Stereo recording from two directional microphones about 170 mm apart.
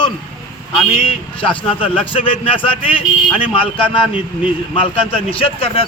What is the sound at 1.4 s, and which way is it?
A man's voice, 30° left (ahead or behind).